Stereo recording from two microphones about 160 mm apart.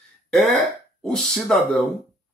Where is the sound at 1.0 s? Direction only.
5° left (ahead or behind).